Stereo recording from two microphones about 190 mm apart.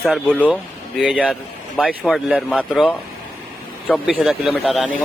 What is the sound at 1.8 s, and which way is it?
Speech, centre (ahead or behind).